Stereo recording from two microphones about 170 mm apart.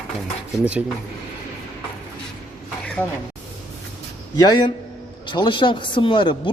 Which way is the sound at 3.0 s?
10° left (ahead or behind).